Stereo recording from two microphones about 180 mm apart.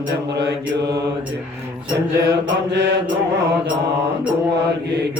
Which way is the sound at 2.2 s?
70° right (ahead or behind).